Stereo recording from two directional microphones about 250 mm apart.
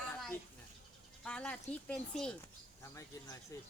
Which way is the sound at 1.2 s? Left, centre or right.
Centre.